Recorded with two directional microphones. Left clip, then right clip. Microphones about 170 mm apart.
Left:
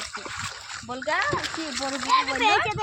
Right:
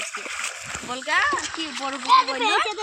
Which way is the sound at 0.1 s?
40° right (ahead or behind).